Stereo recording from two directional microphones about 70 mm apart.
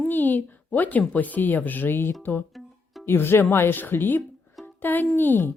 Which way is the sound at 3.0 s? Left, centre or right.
Left.